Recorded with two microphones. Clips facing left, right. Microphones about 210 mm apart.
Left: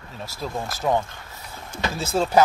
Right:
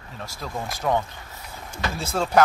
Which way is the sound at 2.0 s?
5° left (ahead or behind).